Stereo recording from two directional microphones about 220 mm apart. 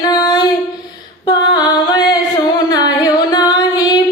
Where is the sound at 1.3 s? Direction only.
20° left (ahead or behind).